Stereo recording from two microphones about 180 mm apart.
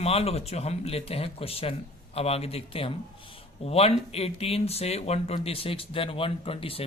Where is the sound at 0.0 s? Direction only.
35° left (ahead or behind).